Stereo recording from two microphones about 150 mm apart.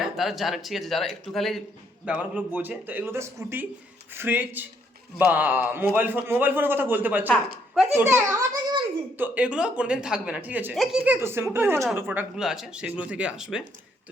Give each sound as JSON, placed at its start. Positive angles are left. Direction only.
{"t": 0.0, "sound": "a man's voice", "side_deg": 0}